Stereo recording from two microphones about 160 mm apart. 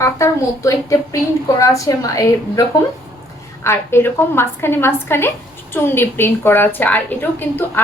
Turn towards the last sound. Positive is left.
turn(degrees=10)  # may be behind; listen again after turning